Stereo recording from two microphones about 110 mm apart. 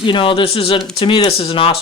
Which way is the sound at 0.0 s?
50° left (ahead or behind).